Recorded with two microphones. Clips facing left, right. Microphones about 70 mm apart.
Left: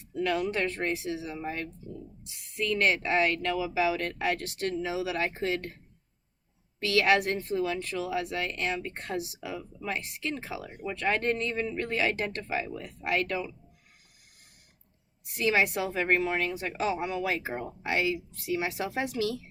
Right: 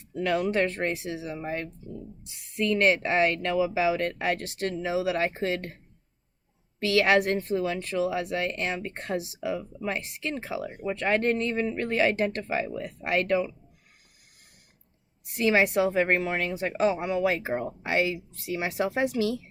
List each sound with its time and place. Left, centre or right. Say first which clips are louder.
0.2 s speech: right 3 dB; right
6.8 s speech: right 3 dB; right
15.4 s speech: right 4 dB; right